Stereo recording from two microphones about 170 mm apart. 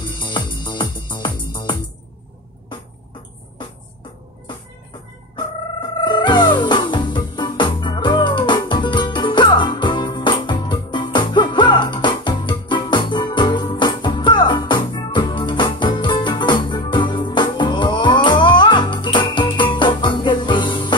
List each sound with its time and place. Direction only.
0.0 s music: 25° left (ahead or behind)
5.3 s music: 30° left (ahead or behind)